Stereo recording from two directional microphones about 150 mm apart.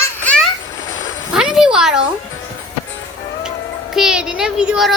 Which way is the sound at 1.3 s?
5° right (ahead or behind).